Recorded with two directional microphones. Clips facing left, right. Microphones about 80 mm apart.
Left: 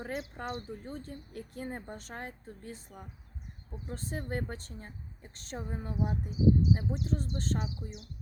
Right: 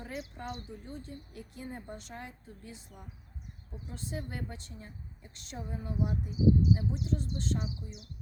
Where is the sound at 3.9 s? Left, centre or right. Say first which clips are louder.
Left 3 dB; left.